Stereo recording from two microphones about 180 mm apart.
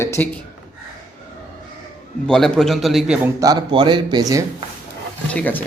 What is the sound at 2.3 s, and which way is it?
A man's voice, 5° left (ahead or behind).